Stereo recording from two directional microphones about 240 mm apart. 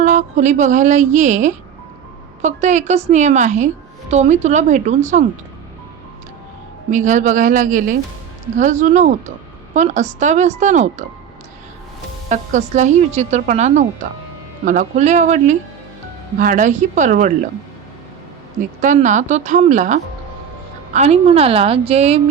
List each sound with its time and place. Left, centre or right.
0.0 s a woman's voice: right
6.9 s a woman's voice: right
12.3 s a woman's voice: right
18.8 s a woman's voice: right